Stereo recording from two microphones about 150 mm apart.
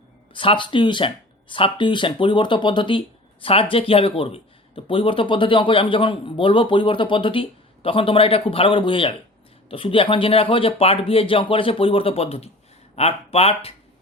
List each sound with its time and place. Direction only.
0.3 s speech: 35° left (ahead or behind)